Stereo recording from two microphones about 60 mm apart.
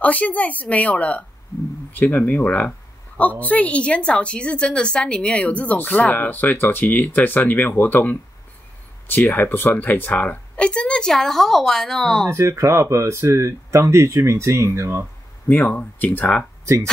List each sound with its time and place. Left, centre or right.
0.0 s a woman's voice: left; by 12.3 s centre
12.3 s speech: right
15.4 s a woman's voice: left